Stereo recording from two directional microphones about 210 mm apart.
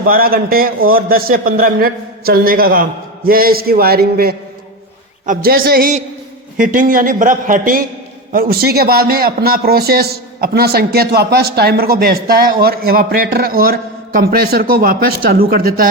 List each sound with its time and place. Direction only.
0.1 s a man's voice: 45° right (ahead or behind)